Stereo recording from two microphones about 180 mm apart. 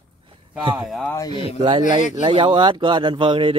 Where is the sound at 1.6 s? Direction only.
25° right (ahead or behind).